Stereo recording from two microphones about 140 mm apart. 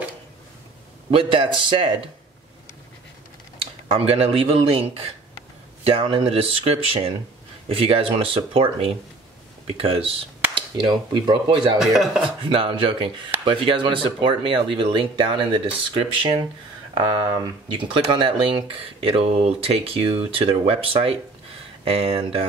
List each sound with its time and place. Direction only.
1.1 s speech: 40° right (ahead or behind)
3.9 s a man's voice: 45° right (ahead or behind)
11.8 s speech: centre (ahead or behind)
12.4 s a man's voice: 35° right (ahead or behind)